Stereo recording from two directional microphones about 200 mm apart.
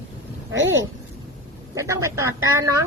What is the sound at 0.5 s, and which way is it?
Speech, 70° right (ahead or behind).